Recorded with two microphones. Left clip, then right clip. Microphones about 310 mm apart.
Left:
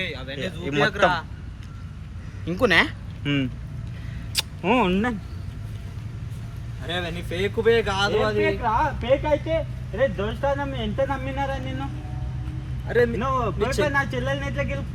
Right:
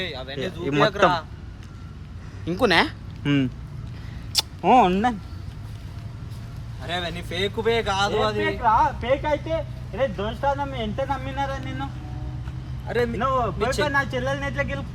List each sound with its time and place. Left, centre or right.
0.0 s speech: right
2.4 s speech: right
6.8 s speech: centre
12.9 s speech: centre